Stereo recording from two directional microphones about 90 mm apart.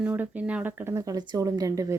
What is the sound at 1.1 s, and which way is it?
Speech, 50° right (ahead or behind).